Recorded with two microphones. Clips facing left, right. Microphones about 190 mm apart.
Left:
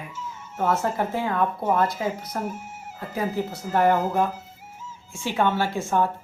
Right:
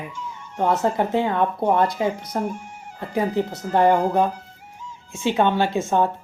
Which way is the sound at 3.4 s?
5° left (ahead or behind).